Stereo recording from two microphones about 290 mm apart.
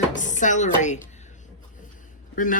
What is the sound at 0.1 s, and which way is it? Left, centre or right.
Chopping, left.